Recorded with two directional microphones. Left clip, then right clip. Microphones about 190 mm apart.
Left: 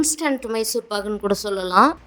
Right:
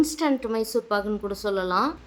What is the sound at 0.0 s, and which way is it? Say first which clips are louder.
A woman's voice: left 1 dB; 40° left (ahead or behind).